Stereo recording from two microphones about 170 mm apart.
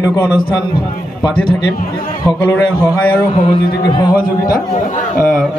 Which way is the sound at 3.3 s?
25° left (ahead or behind).